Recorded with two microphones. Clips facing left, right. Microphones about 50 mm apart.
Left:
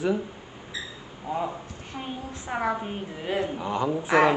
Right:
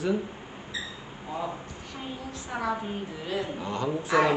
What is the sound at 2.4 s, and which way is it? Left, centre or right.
A woman's voice, left.